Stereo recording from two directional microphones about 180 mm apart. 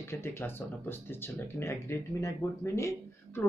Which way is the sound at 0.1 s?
15° left (ahead or behind).